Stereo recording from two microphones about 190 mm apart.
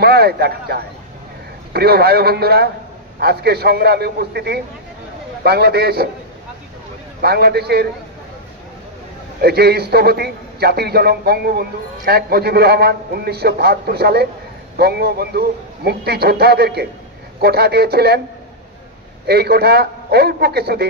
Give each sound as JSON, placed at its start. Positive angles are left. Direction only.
{"t": 0.0, "sound": "a man's voice", "side_deg": -55}
{"t": 7.2, "sound": "a man's voice", "side_deg": -55}
{"t": 9.4, "sound": "a man's voice", "side_deg": -55}
{"t": 19.2, "sound": "a man's voice", "side_deg": -55}